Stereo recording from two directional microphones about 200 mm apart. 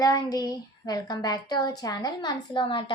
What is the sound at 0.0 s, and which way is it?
A woman's voice, 15° left (ahead or behind).